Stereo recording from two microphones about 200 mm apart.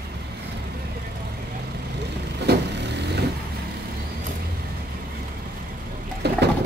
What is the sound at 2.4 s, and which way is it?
Vehicle, 55° right (ahead or behind).